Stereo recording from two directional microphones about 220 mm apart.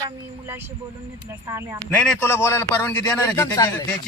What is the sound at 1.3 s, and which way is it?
Speech, 10° right (ahead or behind).